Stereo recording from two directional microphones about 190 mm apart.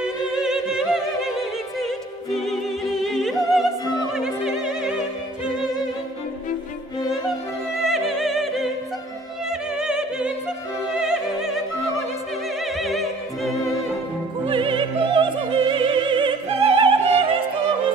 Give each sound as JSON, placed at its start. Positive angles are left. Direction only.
{"t": 0.0, "sound": "opera", "side_deg": -5}
{"t": 2.3, "sound": "opera", "side_deg": 0}
{"t": 7.8, "sound": "opera", "side_deg": 0}
{"t": 10.9, "sound": "music", "side_deg": -5}
{"t": 12.7, "sound": "opera", "side_deg": 0}
{"t": 14.4, "sound": "opera", "side_deg": -25}